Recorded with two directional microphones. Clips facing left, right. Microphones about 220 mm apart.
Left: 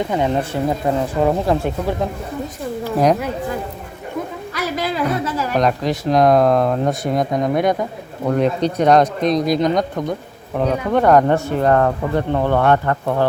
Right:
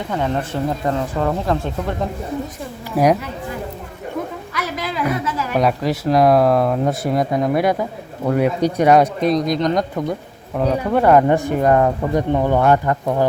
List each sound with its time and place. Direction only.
0.1 s speech: 15° left (ahead or behind)
4.5 s a sound: 30° left (ahead or behind)
5.5 s speech: 5° right (ahead or behind)
9.5 s speech: 5° left (ahead or behind)
10.1 s speech: 5° right (ahead or behind)